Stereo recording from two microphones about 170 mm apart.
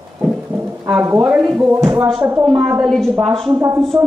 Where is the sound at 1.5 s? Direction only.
5° right (ahead or behind).